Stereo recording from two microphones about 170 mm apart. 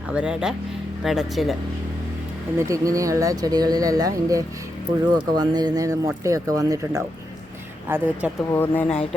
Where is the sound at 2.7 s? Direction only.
20° right (ahead or behind).